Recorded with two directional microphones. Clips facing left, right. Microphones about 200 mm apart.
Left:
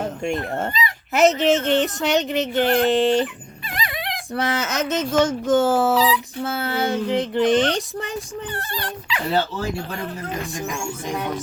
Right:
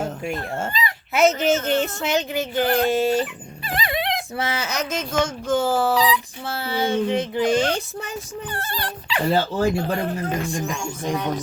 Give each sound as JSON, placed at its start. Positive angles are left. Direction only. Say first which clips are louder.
{"t": 1.1, "sound": "speech", "louder": "left 2 dB", "side_deg": 0}
{"t": 3.7, "sound": "dog", "louder": "right 4 dB", "side_deg": -30}
{"t": 4.4, "sound": "speech", "louder": "left 7 dB", "side_deg": 0}
{"t": 8.5, "sound": "speech", "louder": "even", "side_deg": -35}